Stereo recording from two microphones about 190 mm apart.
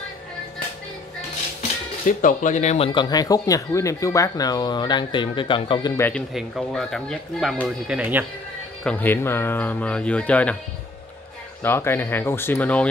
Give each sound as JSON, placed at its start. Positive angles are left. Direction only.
{"t": 2.0, "sound": "speech", "side_deg": 45}
{"t": 6.0, "sound": "speech", "side_deg": 0}
{"t": 8.8, "sound": "speech", "side_deg": 10}
{"t": 11.6, "sound": "speech", "side_deg": 10}